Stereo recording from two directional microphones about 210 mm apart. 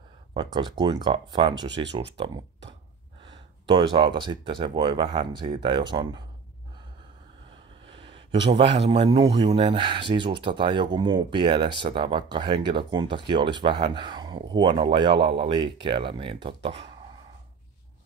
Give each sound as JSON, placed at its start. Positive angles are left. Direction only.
{"t": 0.3, "sound": "speech", "side_deg": -20}
{"t": 7.8, "sound": "a sound", "side_deg": -25}
{"t": 8.7, "sound": "speech", "side_deg": -25}